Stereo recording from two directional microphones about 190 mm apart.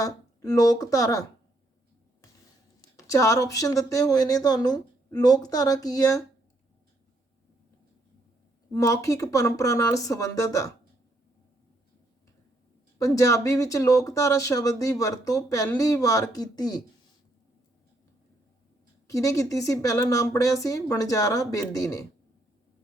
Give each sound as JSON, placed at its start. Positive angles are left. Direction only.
{"t": 0.0, "sound": "speech", "side_deg": 20}
{"t": 2.9, "sound": "speech", "side_deg": 15}
{"t": 8.7, "sound": "speech", "side_deg": 15}
{"t": 13.0, "sound": "speech", "side_deg": 15}
{"t": 19.0, "sound": "speech", "side_deg": 15}